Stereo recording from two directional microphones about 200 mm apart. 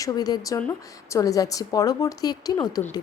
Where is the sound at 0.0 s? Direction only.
20° left (ahead or behind).